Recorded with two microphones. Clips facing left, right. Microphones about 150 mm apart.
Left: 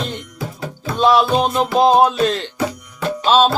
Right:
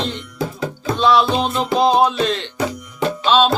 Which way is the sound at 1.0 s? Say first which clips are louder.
Left 2 dB; 45° left (ahead or behind).